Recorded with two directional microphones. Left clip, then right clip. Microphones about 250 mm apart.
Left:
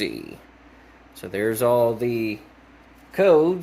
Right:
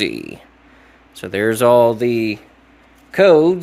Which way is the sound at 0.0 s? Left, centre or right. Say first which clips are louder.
Right 7 dB; right.